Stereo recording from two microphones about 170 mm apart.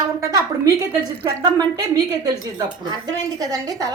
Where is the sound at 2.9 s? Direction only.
25° right (ahead or behind).